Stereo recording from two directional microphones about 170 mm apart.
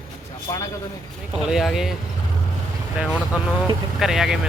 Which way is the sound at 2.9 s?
5° right (ahead or behind).